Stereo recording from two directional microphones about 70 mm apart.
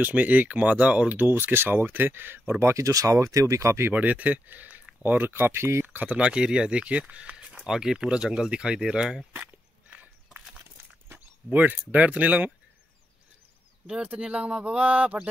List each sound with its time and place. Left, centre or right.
0.0 s speech: right
2.6 s speech: right
3.9 s speech: right
5.9 s speech: centre
9.3 s dog: right
11.5 s speech: right
13.8 s speech: centre